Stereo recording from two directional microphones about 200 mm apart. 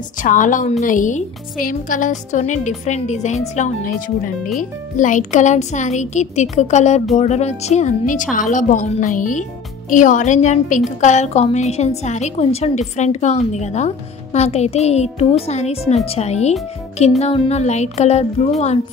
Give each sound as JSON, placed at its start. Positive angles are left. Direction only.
{"t": 0.2, "sound": "a woman's voice", "side_deg": 40}